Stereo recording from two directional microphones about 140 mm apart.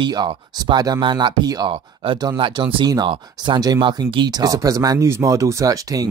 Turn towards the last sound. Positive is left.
turn(degrees=-25)  # may be behind; listen again after turning